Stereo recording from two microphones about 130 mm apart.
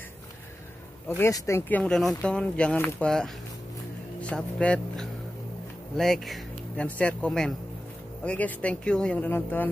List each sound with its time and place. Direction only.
1.0 s speech: 20° left (ahead or behind)
1.7 s speech: 10° left (ahead or behind)